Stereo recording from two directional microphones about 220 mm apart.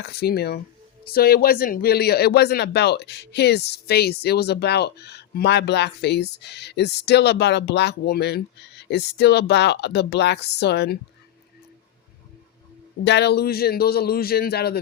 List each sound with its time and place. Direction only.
0.2 s speech: 45° left (ahead or behind)
13.1 s speech: 50° left (ahead or behind)